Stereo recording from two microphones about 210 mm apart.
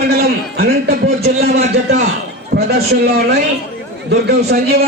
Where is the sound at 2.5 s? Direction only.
50° right (ahead or behind).